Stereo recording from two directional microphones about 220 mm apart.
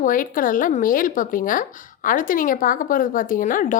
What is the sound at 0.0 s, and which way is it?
Speech, 40° left (ahead or behind).